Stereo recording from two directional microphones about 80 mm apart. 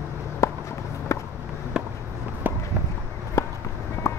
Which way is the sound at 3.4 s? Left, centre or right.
Left.